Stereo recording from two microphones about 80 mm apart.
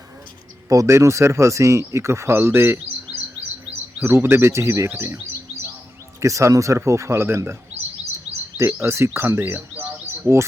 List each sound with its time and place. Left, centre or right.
0.7 s speech: right
4.0 s speech: right
6.1 s speech: right
8.3 s a sound: right
9.1 s speech: right
9.4 s speech: right
10.3 s speech: right